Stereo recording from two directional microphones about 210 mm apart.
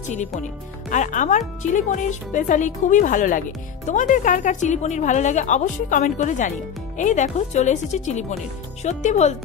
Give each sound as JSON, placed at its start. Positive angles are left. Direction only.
{"t": 0.1, "sound": "speech", "side_deg": 35}